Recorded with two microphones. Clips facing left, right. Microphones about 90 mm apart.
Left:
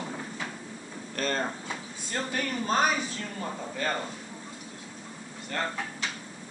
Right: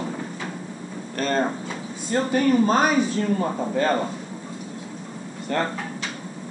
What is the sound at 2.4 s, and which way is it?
Speech, 30° right (ahead or behind).